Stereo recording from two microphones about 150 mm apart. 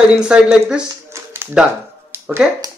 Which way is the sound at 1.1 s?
15° right (ahead or behind).